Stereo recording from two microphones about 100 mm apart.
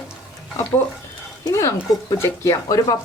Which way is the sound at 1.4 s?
30° left (ahead or behind).